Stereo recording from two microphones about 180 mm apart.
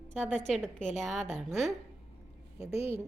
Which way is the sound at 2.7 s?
35° left (ahead or behind).